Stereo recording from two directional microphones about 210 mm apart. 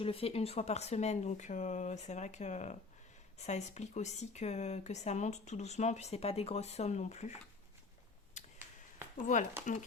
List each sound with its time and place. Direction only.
0.0 s speech: 25° left (ahead or behind)
8.4 s a sound: 35° left (ahead or behind)
9.1 s speech: 35° left (ahead or behind)